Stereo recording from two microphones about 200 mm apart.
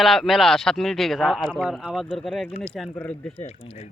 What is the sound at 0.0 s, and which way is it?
A man's voice, centre (ahead or behind).